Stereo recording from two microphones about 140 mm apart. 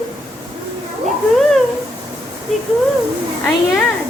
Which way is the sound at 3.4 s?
5° left (ahead or behind).